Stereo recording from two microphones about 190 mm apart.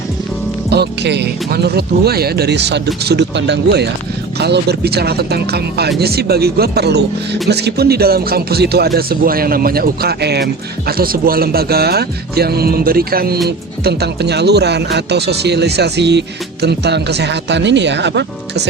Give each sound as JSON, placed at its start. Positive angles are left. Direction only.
{"t": 0.7, "sound": "speech", "side_deg": -60}